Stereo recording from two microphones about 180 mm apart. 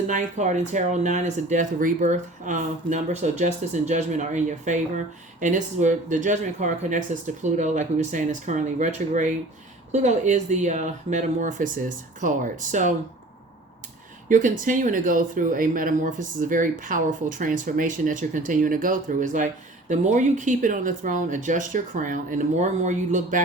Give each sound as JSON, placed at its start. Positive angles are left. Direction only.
{"t": 0.1, "sound": "speech", "side_deg": -40}
{"t": 14.3, "sound": "speech", "side_deg": -45}